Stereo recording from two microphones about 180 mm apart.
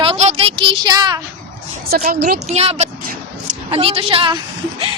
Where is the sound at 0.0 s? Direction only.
35° right (ahead or behind).